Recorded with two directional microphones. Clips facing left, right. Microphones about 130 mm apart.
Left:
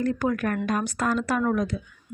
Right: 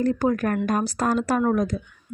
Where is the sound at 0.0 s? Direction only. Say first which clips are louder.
Right 3 dB; 35° right (ahead or behind).